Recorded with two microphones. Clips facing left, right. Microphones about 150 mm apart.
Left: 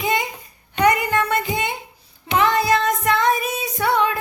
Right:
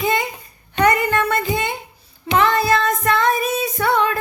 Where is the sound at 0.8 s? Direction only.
15° left (ahead or behind).